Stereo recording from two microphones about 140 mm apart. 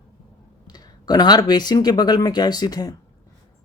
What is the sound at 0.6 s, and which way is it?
Speech, 30° left (ahead or behind).